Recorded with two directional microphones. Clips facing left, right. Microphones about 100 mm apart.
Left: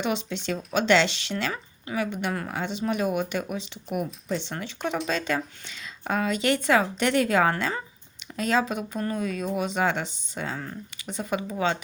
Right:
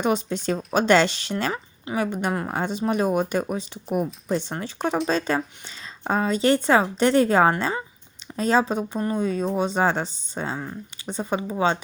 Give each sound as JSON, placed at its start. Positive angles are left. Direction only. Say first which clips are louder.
{"t": 0.0, "sound": "speech", "louder": "right 5 dB", "side_deg": -40}